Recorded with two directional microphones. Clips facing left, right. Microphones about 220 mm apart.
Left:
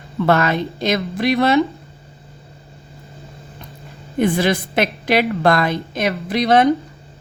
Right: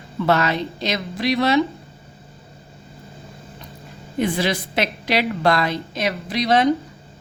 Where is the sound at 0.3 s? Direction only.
50° left (ahead or behind).